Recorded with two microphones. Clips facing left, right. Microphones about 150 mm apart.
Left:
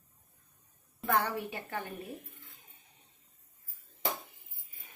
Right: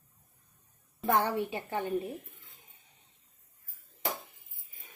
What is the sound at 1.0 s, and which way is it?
Speech, 20° right (ahead or behind).